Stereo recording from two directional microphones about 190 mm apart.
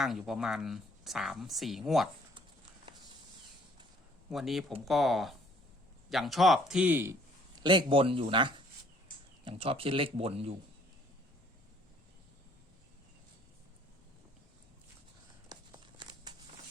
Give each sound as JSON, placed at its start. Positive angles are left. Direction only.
{"t": 0.0, "sound": "a woman's voice", "side_deg": 0}
{"t": 4.3, "sound": "a woman's voice", "side_deg": 0}
{"t": 7.6, "sound": "speech", "side_deg": -25}
{"t": 15.4, "sound": "a sound", "side_deg": -25}